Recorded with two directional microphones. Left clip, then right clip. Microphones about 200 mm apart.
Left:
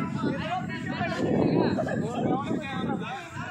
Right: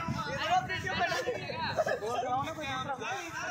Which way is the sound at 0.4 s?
45° right (ahead or behind).